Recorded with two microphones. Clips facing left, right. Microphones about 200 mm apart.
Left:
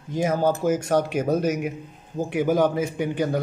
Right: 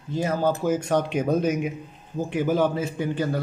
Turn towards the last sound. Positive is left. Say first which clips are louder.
# left 2 dB
turn(degrees=15)  # may be behind; listen again after turning